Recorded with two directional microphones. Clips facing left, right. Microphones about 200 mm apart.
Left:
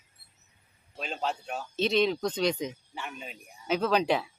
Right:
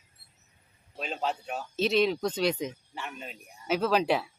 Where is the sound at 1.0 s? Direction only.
Centre (ahead or behind).